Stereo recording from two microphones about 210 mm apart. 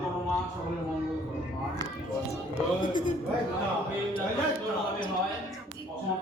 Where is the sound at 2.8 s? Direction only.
40° left (ahead or behind).